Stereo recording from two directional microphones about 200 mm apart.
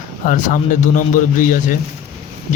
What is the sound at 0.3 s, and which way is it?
Speech, 40° left (ahead or behind).